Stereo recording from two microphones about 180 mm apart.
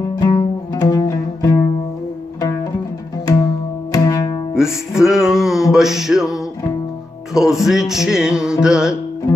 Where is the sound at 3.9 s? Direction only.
20° left (ahead or behind).